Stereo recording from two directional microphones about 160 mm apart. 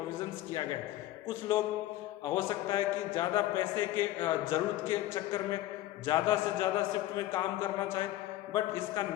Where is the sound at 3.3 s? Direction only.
15° left (ahead or behind).